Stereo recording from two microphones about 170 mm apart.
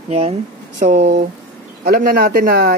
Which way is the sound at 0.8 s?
45° right (ahead or behind).